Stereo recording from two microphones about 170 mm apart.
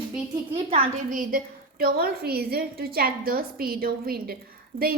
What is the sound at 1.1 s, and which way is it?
A woman's voice, 55° right (ahead or behind).